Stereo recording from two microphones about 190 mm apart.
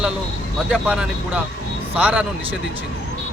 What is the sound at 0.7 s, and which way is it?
Speech, 5° right (ahead or behind).